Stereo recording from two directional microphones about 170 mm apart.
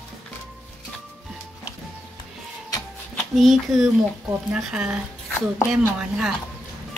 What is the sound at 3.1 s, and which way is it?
A woman's voice, centre (ahead or behind).